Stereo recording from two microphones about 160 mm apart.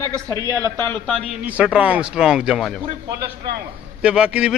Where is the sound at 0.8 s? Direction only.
10° left (ahead or behind).